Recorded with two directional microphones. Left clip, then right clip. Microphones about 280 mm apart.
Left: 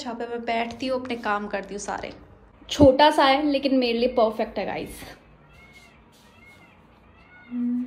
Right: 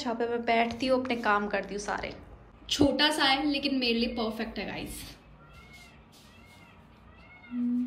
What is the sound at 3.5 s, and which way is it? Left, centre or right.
A woman's voice, centre.